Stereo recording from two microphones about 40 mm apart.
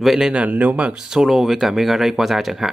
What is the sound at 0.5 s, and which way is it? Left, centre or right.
Speech, right.